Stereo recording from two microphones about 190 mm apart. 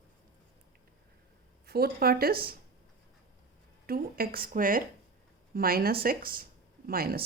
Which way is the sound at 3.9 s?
50° right (ahead or behind).